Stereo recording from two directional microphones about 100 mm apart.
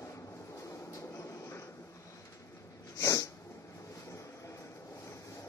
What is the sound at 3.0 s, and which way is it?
Sneeze, 35° left (ahead or behind).